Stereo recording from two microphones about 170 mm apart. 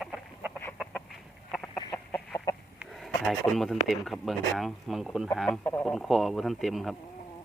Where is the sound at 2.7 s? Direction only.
Centre (ahead or behind).